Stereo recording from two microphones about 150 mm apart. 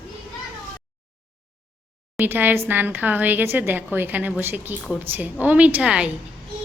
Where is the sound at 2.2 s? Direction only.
15° right (ahead or behind).